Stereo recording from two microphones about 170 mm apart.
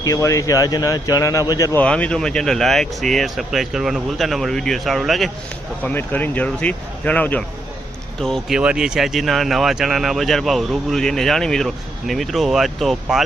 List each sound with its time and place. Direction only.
0.0 s speech: 20° left (ahead or behind)
1.8 s speech: 5° left (ahead or behind)
5.8 s speech: 10° left (ahead or behind)